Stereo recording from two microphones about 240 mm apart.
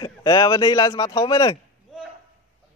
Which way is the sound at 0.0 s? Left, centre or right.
Centre.